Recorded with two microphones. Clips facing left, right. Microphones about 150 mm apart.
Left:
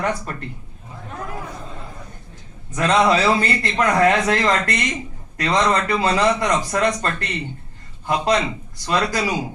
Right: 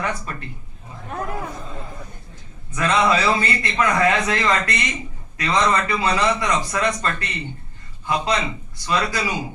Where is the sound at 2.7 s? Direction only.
40° left (ahead or behind).